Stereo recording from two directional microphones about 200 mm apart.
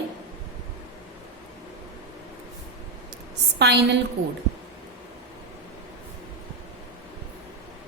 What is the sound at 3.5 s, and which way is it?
Speech, 60° right (ahead or behind).